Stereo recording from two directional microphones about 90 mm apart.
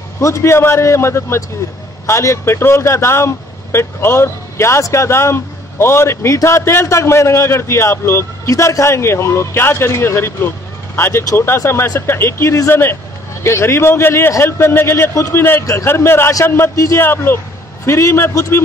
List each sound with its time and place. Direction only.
0.2 s a man's voice: 30° left (ahead or behind)